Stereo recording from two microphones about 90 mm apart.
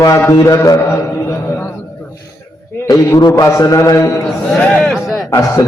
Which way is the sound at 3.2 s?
50° left (ahead or behind).